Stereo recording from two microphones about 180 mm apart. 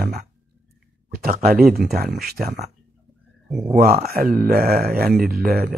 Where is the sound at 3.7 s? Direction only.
60° right (ahead or behind).